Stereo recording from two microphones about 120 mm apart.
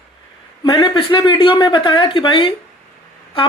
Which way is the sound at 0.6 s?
45° left (ahead or behind).